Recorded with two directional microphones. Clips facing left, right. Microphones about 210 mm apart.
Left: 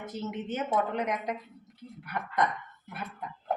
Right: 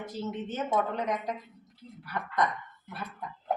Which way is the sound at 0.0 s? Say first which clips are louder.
Right 1 dB; 20° left (ahead or behind).